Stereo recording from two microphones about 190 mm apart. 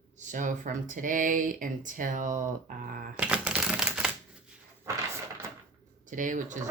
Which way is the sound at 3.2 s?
5° right (ahead or behind).